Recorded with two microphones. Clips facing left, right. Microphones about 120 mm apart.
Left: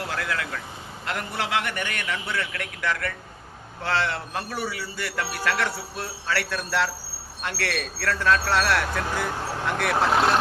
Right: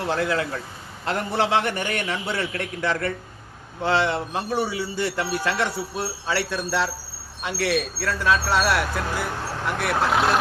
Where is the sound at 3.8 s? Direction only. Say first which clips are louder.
Right 4 dB; 15° right (ahead or behind).